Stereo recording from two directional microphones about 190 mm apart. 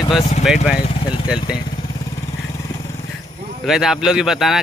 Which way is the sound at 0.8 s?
25° left (ahead or behind).